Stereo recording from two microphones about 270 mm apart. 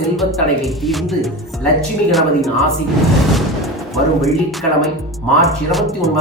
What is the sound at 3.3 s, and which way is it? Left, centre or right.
Music, centre.